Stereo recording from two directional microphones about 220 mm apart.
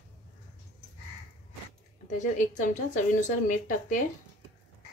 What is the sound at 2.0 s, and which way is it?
A woman's voice, 35° left (ahead or behind).